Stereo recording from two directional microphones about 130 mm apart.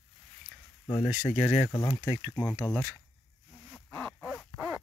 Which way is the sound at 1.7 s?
30° left (ahead or behind).